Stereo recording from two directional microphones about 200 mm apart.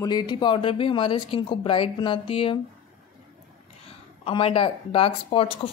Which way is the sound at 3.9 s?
30° left (ahead or behind).